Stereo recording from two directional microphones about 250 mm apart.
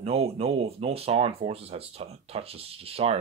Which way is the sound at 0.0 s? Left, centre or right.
Right.